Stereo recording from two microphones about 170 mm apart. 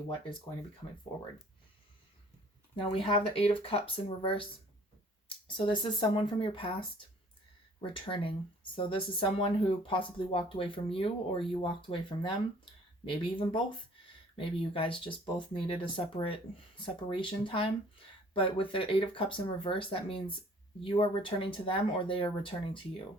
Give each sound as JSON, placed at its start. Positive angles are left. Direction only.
{"t": 2.9, "sound": "speech", "side_deg": 35}
{"t": 5.5, "sound": "speech", "side_deg": 30}